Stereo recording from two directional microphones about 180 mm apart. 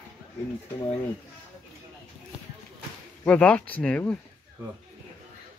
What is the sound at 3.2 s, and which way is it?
Speech, 5° left (ahead or behind).